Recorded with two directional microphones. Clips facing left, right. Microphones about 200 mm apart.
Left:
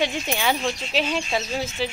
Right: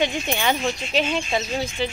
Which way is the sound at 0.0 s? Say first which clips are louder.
Right 1 dB; centre (ahead or behind).